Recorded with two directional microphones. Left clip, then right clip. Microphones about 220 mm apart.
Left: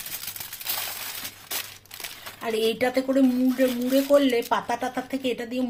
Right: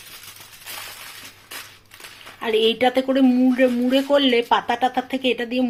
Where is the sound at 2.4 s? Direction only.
10° right (ahead or behind).